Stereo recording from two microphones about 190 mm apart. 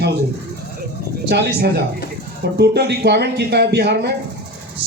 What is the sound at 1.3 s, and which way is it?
Speech, 60° right (ahead or behind).